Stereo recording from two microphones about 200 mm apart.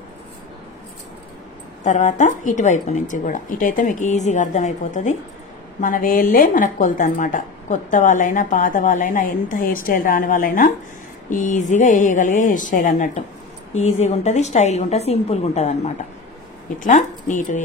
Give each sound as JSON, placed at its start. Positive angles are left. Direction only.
{"t": 1.9, "sound": "speech", "side_deg": 35}